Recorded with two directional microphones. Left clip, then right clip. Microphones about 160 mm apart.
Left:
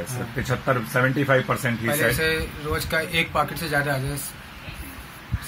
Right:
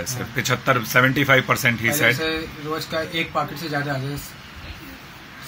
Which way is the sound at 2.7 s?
20° left (ahead or behind).